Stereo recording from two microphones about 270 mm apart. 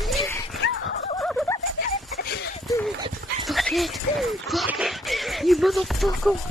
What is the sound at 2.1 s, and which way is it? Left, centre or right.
Dog, left.